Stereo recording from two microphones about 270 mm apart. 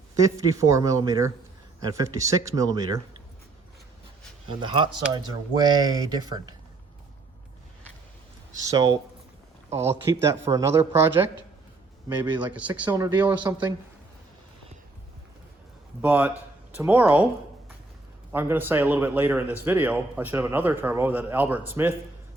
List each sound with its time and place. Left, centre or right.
0.2 s speech: centre
4.4 s speech: centre
8.7 s speech: centre
12.4 s speech: centre
16.0 s speech: centre
18.3 s speech: centre